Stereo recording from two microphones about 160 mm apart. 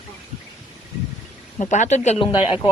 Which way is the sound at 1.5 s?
50° left (ahead or behind).